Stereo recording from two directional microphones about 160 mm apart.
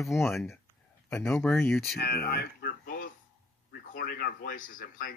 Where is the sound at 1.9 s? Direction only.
75° left (ahead or behind).